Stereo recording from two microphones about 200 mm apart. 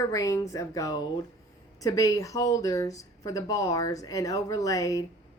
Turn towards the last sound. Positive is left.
turn(degrees=15)  # may be behind; listen again after turning